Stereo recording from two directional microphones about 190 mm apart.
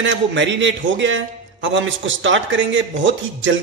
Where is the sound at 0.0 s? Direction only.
70° right (ahead or behind).